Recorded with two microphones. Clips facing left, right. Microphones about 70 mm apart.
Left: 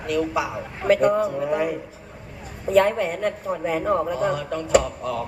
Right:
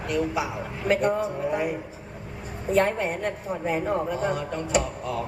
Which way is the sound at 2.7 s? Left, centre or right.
Right.